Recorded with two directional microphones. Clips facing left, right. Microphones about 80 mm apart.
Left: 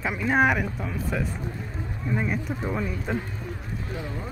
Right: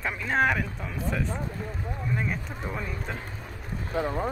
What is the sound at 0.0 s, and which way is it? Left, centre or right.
Speech, centre.